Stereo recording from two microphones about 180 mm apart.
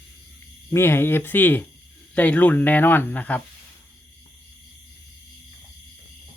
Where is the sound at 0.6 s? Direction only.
15° left (ahead or behind).